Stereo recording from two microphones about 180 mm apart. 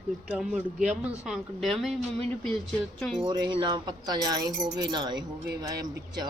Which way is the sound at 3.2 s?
25° right (ahead or behind).